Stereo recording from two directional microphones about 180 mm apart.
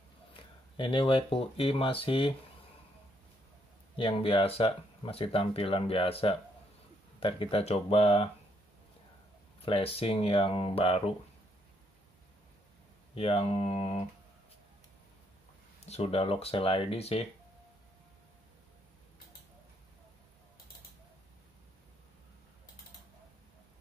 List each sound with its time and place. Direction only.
0.7 s speech: 30° left (ahead or behind)
3.9 s speech: 30° left (ahead or behind)
9.7 s speech: 30° left (ahead or behind)
13.1 s speech: 35° left (ahead or behind)
15.8 s speech: 35° left (ahead or behind)